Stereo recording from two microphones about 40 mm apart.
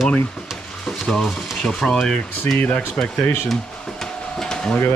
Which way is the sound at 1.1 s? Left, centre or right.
Centre.